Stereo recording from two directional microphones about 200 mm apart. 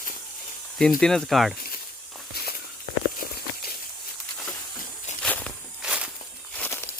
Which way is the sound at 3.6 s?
50° left (ahead or behind).